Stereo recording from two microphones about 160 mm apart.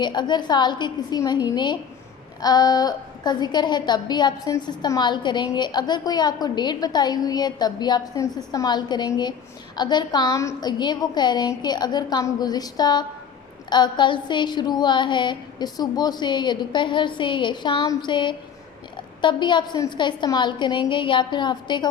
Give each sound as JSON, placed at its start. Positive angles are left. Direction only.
{"t": 0.0, "sound": "a woman's voice", "side_deg": 30}